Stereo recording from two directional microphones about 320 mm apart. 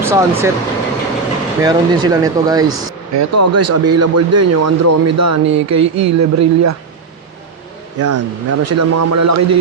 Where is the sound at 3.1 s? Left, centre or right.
Right.